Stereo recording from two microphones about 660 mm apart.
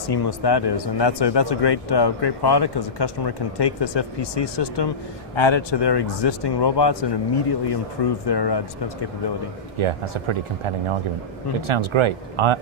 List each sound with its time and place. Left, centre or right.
0.1 s speech: left
9.7 s speech: right